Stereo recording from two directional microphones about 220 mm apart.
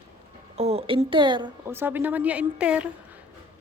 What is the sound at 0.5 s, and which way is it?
Speech, 25° right (ahead or behind).